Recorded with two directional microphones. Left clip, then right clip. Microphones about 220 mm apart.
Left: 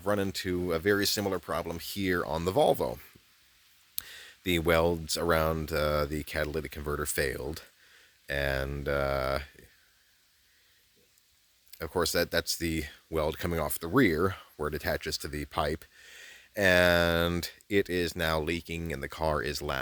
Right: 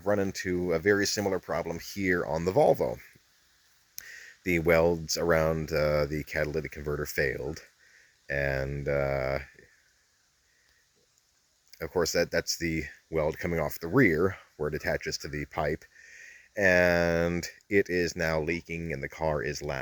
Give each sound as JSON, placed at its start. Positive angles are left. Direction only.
{"t": 0.0, "sound": "speech", "side_deg": 15}
{"t": 4.0, "sound": "speech", "side_deg": 20}
{"t": 7.2, "sound": "speech", "side_deg": 25}
{"t": 11.8, "sound": "speech", "side_deg": 15}
{"t": 12.0, "sound": "speech", "side_deg": 25}